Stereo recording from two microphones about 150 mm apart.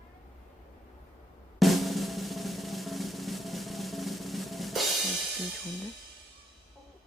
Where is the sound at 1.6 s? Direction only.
Centre (ahead or behind).